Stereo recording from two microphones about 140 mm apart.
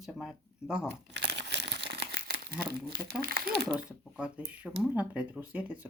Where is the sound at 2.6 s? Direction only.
90° right.